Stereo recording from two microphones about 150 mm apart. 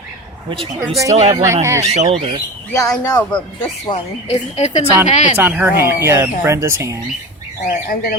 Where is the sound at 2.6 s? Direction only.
20° left (ahead or behind).